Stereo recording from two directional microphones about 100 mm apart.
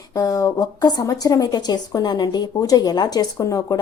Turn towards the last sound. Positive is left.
turn(degrees=40)  # may be behind; listen again after turning